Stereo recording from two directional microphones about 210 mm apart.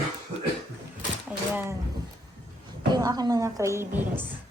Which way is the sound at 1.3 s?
10° right (ahead or behind).